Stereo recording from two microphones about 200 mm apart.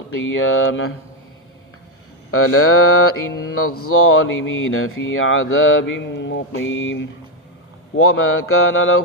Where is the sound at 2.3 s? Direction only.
90° left.